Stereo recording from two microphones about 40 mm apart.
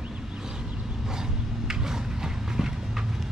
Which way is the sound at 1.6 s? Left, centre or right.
Centre.